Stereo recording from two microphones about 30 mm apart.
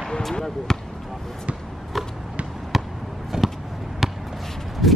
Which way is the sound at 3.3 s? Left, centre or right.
Right.